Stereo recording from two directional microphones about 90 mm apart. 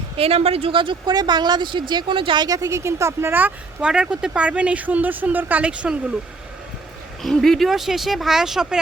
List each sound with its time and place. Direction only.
0.2 s speech: 90° right; by 1.1 s 70° right (ahead or behind)
1.1 s a woman's voice: 50° right (ahead or behind); by 2.4 s 70° right (ahead or behind)
2.4 s speech: 45° right (ahead or behind); by 6.1 s 15° right (ahead or behind)
7.2 s speech: centre (ahead or behind)